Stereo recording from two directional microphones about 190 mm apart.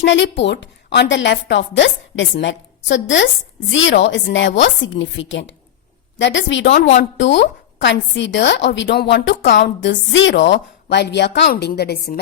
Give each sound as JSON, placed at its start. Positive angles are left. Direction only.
{"t": 0.0, "sound": "a woman's voice", "side_deg": 70}